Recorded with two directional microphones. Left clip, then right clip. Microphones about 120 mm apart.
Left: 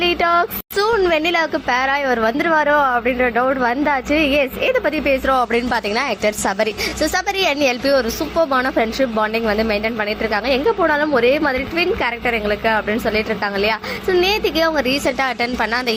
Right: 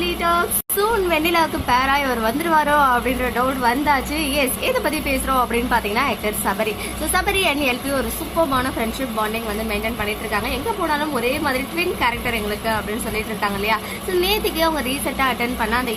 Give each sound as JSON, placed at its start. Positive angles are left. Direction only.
{"t": 0.0, "sound": "music", "side_deg": 55}
{"t": 1.1, "sound": "a woman's voice", "side_deg": 40}
{"t": 5.3, "sound": "a woman's voice", "side_deg": 50}